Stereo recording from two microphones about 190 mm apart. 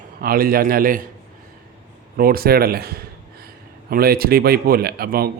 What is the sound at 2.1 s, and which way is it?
A man's voice, 50° right (ahead or behind).